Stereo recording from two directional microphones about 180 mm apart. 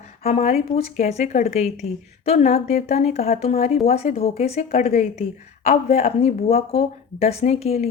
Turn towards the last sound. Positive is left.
turn(degrees=35)  # may be behind; listen again after turning